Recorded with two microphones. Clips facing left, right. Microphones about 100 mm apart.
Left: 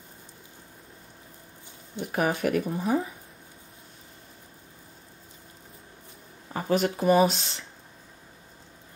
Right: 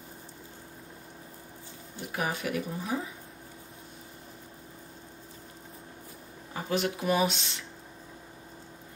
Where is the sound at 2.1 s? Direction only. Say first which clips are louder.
Left 6 dB; 50° left (ahead or behind).